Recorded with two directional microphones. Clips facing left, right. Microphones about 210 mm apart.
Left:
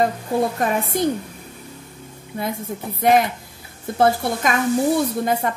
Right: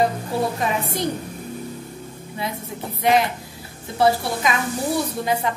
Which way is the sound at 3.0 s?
50° left (ahead or behind).